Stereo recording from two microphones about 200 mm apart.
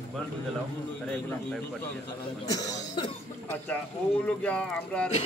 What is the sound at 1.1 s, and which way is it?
Speech, 10° left (ahead or behind).